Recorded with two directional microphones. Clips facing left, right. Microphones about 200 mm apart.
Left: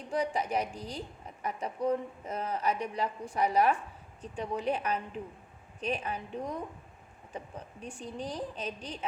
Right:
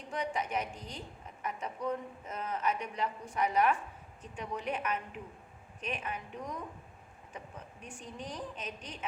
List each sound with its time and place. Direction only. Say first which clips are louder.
0.1 s a woman's voice: left 4 dB; 35° left (ahead or behind)